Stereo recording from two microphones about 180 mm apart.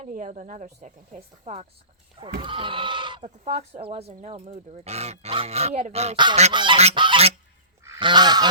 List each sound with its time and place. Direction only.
0.0 s speech: 40° right (ahead or behind)
2.2 s speech: 30° right (ahead or behind)
3.4 s speech: 40° right (ahead or behind); by 8.4 s 25° right (ahead or behind)